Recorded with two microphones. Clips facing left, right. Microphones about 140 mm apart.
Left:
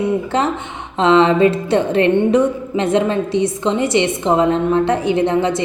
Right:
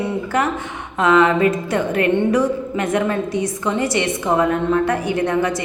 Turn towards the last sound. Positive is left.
turn(degrees=25)  # may be behind; listen again after turning